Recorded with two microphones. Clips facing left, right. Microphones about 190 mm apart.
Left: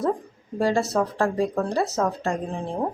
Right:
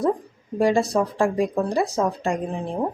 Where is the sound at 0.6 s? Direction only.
15° right (ahead or behind).